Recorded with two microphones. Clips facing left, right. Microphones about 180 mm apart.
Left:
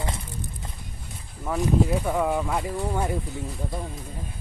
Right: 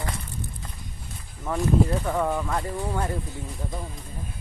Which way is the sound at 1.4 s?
5° left (ahead or behind).